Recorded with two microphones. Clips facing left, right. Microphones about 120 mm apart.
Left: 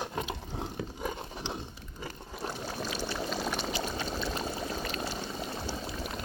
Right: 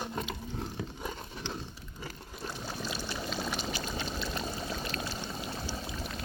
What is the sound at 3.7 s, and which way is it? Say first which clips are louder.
Pour: left 2 dB; 25° left (ahead or behind).